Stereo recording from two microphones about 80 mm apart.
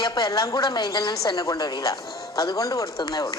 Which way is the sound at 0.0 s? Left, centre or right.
Left.